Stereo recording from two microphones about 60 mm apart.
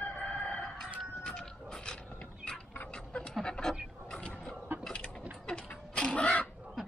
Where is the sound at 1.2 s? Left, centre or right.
Centre.